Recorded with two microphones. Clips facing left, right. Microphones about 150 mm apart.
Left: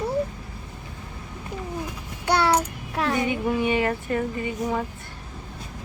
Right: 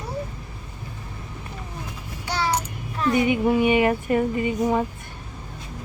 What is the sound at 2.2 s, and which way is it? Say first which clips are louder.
Child singing: left 5 dB; 65° left (ahead or behind).